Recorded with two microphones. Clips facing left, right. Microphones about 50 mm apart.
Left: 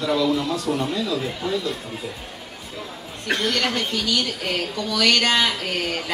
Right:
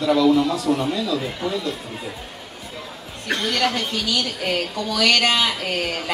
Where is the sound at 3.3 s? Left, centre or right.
Centre.